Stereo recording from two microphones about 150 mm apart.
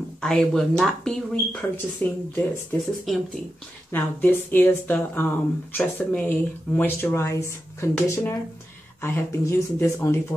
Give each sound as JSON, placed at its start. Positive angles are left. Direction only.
{"t": 0.2, "sound": "speech", "side_deg": 5}
{"t": 3.1, "sound": "speech", "side_deg": 0}
{"t": 3.9, "sound": "speech", "side_deg": 15}